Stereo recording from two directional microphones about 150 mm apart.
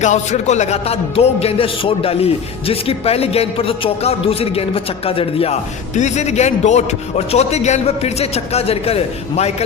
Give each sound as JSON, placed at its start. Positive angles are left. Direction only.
{"t": 0.0, "sound": "a man's voice", "side_deg": 50}